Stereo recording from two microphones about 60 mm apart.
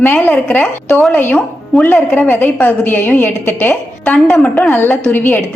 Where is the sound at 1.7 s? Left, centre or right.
Centre.